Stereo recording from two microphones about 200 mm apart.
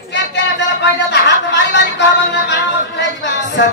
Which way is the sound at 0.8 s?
60° left (ahead or behind).